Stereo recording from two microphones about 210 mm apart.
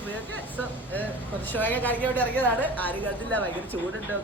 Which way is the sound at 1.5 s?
10° left (ahead or behind).